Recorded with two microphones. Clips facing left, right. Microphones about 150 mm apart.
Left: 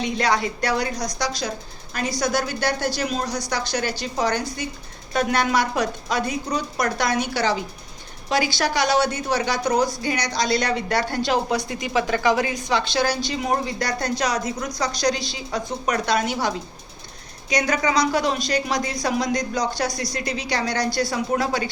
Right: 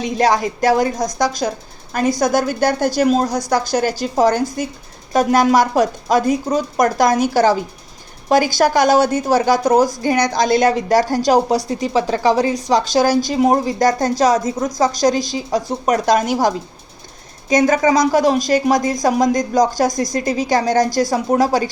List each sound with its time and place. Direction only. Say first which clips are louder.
0.0 s a woman's voice: right 6 dB; 45° right (ahead or behind)
14.3 s a woman's voice: right 7 dB; 25° right (ahead or behind)
14.8 s a woman's voice: right 8 dB; 45° right (ahead or behind)